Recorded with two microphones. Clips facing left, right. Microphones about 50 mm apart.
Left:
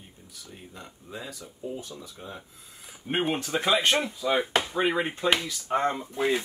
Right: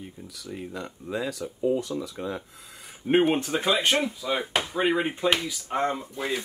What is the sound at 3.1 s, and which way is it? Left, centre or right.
Speech, right.